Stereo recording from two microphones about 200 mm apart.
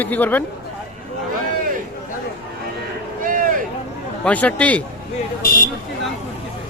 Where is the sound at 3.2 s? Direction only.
45° right (ahead or behind).